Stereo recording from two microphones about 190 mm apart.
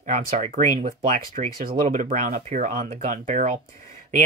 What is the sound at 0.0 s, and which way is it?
Speech, 40° right (ahead or behind).